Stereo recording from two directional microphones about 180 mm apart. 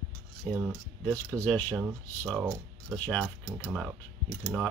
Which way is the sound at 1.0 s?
10° left (ahead or behind).